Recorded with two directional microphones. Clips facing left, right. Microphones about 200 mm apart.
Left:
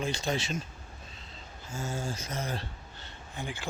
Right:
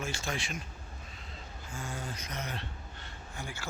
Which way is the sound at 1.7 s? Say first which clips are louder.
Left 5 dB; 25° left (ahead or behind).